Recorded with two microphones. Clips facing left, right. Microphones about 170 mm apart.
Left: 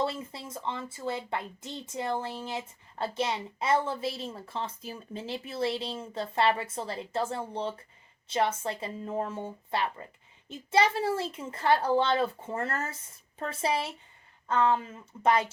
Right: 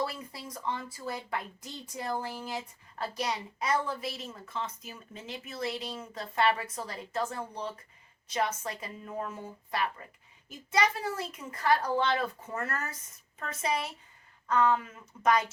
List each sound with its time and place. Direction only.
0.0 s a woman's voice: 25° left (ahead or behind)